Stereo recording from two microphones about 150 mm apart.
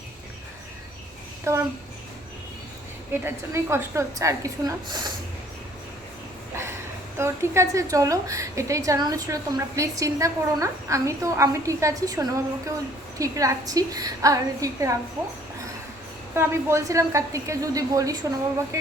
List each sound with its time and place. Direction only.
1.5 s a woman's voice: 20° right (ahead or behind)
3.1 s a woman's voice: 15° right (ahead or behind)
7.2 s a woman's voice: 20° right (ahead or behind)
16.3 s a woman's voice: 15° right (ahead or behind)